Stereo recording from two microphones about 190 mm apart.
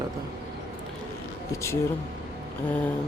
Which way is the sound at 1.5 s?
15° left (ahead or behind).